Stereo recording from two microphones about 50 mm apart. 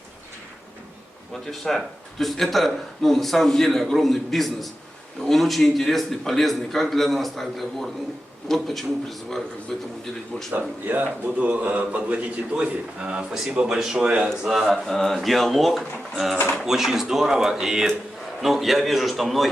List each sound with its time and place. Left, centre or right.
1.3 s a man's voice: centre
10.8 s a man's voice: right; by 14.8 s centre
14.8 s a man's voice: centre